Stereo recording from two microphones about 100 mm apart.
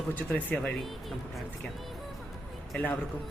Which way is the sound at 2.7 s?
10° left (ahead or behind).